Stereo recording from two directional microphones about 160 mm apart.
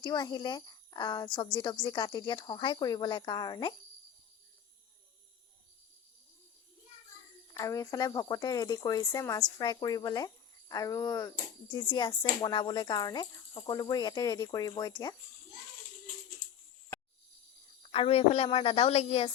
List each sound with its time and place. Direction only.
0.0 s a woman's voice: 25° left (ahead or behind)
7.5 s a woman's voice: 20° left (ahead or behind)
17.8 s a woman's voice: 35° left (ahead or behind)